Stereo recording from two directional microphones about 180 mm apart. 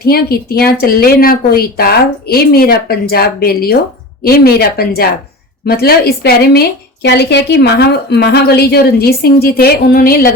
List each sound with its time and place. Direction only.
0.0 s a woman's voice: 55° left (ahead or behind)